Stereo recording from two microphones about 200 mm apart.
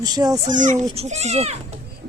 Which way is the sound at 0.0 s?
20° right (ahead or behind).